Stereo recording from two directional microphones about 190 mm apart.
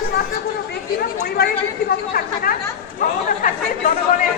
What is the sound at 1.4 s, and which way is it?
Speech, 55° left (ahead or behind).